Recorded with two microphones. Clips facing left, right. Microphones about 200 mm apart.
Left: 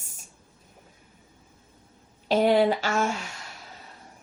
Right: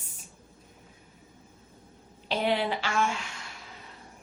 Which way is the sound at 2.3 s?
45° left (ahead or behind).